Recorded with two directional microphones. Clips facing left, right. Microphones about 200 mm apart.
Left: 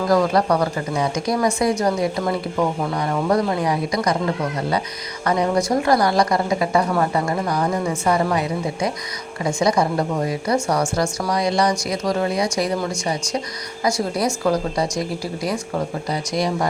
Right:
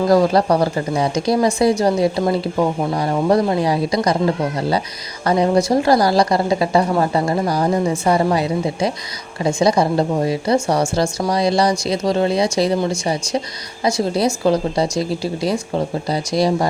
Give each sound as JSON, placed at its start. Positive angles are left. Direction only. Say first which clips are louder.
{"t": 0.1, "sound": "a woman's voice", "louder": "right 2 dB", "side_deg": -30}
{"t": 5.2, "sound": "a woman's voice", "louder": "right 4 dB", "side_deg": -30}